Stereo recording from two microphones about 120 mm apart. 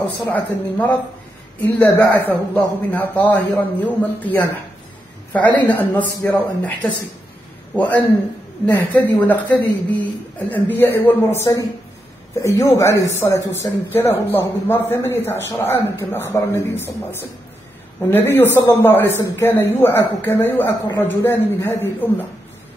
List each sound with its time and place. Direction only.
0.0 s a man's voice: 15° left (ahead or behind)